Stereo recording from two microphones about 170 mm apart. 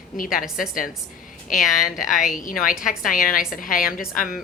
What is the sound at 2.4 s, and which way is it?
A woman's voice, 55° left (ahead or behind).